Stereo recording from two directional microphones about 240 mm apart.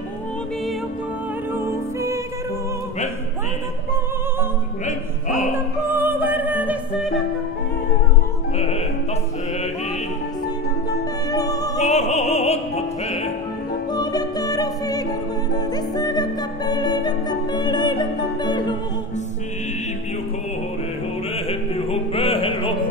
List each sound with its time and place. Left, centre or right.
1.5 s music: centre
4.8 s music: left
5.9 s music: centre
8.5 s music: left
11.3 s music: centre
11.8 s opera: left
13.9 s music: centre
21.5 s music: left